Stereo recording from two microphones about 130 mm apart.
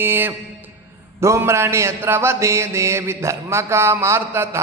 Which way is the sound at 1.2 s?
20° right (ahead or behind).